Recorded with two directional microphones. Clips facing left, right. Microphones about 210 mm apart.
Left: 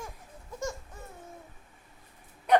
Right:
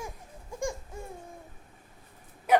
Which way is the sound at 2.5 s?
5° right (ahead or behind).